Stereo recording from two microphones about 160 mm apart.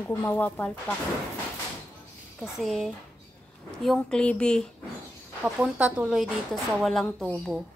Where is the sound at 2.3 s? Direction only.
Centre (ahead or behind).